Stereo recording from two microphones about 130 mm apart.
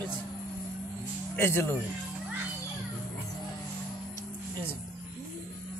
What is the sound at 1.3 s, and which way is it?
Speech, 20° left (ahead or behind).